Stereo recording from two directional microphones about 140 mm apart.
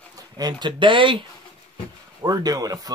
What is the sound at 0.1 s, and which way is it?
Speech, 30° right (ahead or behind).